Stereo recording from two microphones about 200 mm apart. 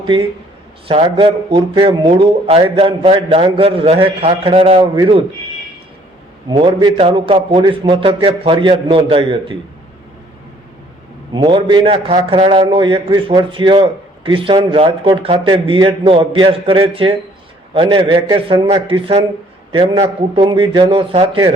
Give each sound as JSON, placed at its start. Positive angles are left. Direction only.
{"t": 0.9, "sound": "a man's voice", "side_deg": -25}
{"t": 6.5, "sound": "a man's voice", "side_deg": -25}
{"t": 11.3, "sound": "a man's voice", "side_deg": -25}